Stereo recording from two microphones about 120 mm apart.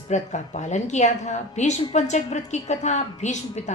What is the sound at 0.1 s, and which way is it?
A woman's voice, 80° left.